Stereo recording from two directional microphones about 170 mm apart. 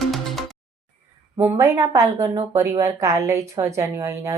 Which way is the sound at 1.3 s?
15° right (ahead or behind).